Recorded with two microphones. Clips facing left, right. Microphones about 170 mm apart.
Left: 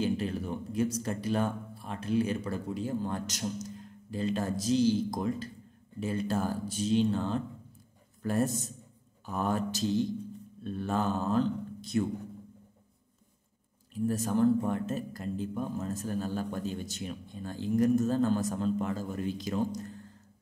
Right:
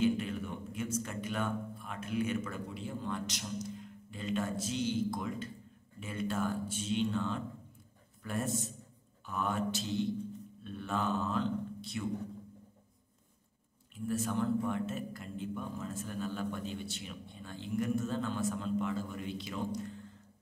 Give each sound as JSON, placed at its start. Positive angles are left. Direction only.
{"t": 0.0, "sound": "a man's voice", "side_deg": 35}
{"t": 13.9, "sound": "speech", "side_deg": 40}